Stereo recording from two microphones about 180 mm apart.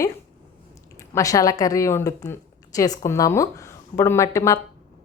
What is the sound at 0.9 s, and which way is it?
A woman's voice, 20° left (ahead or behind).